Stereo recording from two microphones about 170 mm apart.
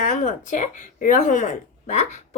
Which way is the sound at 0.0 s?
50° left (ahead or behind).